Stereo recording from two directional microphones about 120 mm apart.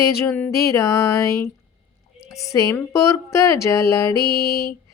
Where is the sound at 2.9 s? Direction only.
25° left (ahead or behind).